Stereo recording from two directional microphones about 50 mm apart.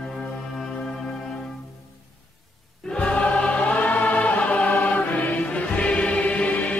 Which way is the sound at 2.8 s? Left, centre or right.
Centre.